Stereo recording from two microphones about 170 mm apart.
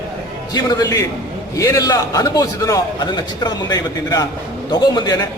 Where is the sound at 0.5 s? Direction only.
25° left (ahead or behind).